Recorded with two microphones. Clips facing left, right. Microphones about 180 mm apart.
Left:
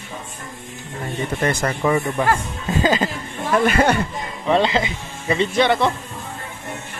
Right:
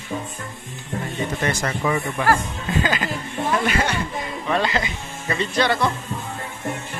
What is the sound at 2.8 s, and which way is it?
Speech, 20° left (ahead or behind).